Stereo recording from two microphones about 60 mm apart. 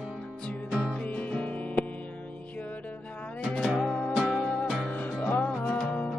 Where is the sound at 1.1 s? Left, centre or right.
Left.